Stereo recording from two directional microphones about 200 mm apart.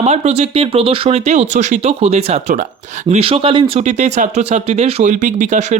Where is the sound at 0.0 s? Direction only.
35° right (ahead or behind).